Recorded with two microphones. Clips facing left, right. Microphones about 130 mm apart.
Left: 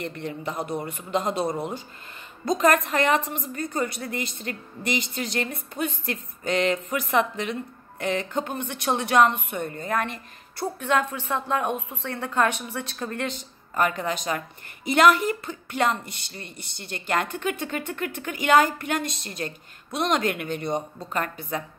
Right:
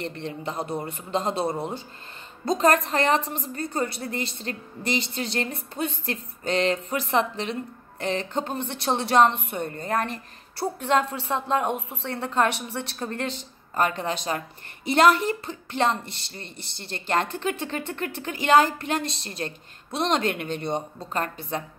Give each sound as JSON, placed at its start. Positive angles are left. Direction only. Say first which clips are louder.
{"t": 0.0, "sound": "a man's voice", "louder": "even", "side_deg": -30}